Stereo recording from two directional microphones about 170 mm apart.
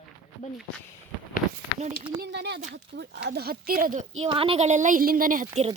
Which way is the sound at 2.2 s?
80° right.